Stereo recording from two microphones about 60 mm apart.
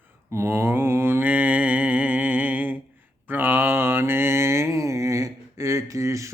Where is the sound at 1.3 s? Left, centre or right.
Right.